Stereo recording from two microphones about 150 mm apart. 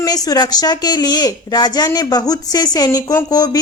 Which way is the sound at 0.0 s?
25° left (ahead or behind).